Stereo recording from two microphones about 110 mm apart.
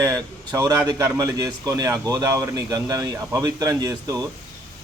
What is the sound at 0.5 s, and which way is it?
A man's voice, 30° right (ahead or behind).